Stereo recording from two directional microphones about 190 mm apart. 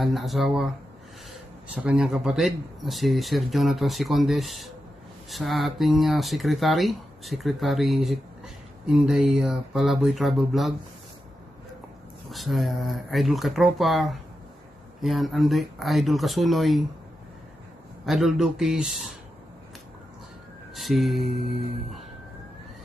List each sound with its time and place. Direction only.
0.0 s speech: centre (ahead or behind)
1.8 s speech: 5° right (ahead or behind)
12.3 s speech: centre (ahead or behind)
18.0 s speech: centre (ahead or behind)
20.7 s a sound: centre (ahead or behind)